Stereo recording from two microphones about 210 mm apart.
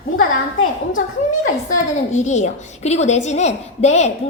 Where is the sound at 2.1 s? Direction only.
35° left (ahead or behind).